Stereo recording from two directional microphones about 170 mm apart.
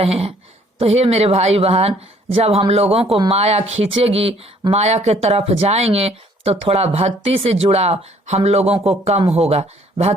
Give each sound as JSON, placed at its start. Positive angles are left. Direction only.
{"t": 0.0, "sound": "speech", "side_deg": -35}